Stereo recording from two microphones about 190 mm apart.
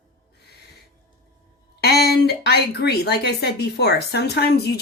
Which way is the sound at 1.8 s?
55° left (ahead or behind).